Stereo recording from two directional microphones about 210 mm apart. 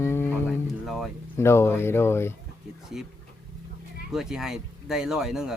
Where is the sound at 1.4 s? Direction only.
10° left (ahead or behind).